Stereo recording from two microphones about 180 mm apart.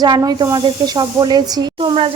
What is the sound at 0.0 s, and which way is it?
Speech, 20° right (ahead or behind).